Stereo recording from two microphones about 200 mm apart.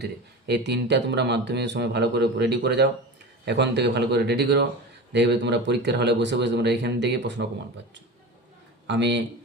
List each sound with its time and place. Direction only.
0.0 s speech: 55° right (ahead or behind)
8.9 s speech: 60° right (ahead or behind)